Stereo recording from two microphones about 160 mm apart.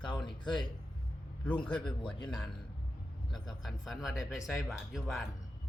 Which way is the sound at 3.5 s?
Centre (ahead or behind).